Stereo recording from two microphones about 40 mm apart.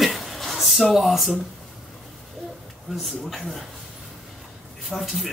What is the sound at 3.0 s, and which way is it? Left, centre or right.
Speech, centre.